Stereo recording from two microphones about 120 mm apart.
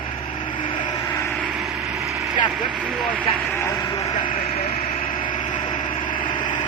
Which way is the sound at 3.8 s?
35° left (ahead or behind).